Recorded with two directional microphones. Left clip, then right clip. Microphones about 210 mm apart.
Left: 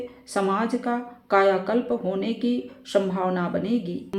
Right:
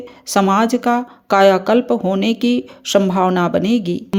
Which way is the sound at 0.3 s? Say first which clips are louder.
Right 10 dB; 30° right (ahead or behind).